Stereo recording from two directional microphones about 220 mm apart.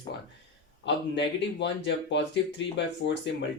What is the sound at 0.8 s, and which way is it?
Speech, 55° left (ahead or behind).